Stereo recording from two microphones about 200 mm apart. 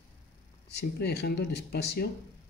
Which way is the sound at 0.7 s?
55° left (ahead or behind).